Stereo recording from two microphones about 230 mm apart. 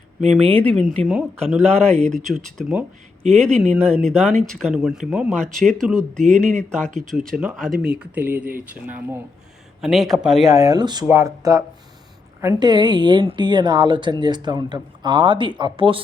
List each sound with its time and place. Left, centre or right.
0.3 s speech: centre
10.5 s a woman's voice: centre